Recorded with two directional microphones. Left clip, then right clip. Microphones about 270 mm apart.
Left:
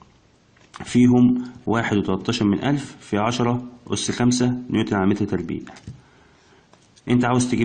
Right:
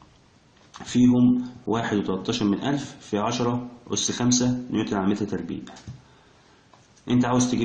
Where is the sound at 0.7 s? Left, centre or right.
Left.